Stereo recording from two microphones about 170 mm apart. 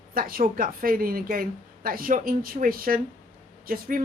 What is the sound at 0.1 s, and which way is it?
Speech, 60° right (ahead or behind).